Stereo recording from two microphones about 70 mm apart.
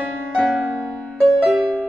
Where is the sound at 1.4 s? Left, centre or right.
Centre.